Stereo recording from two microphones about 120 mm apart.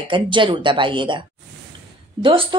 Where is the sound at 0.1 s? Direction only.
45° right (ahead or behind).